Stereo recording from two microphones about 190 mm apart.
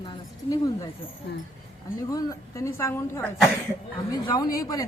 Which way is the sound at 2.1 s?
15° left (ahead or behind).